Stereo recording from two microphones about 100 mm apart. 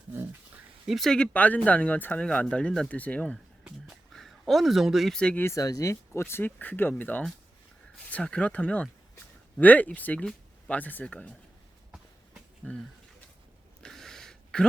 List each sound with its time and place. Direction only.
0.9 s speech: centre (ahead or behind)
4.1 s speech: centre (ahead or behind)
5.4 s speech: 30° left (ahead or behind); by 11.3 s 10° left (ahead or behind)
12.6 s speech: 15° left (ahead or behind)
13.8 s a sound: 5° left (ahead or behind)